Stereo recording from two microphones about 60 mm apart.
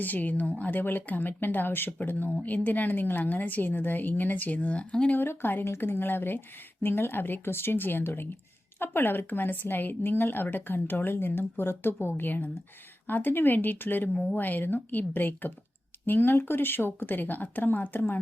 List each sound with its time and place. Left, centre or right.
0.0 s a woman's voice: left
5.1 s speech: left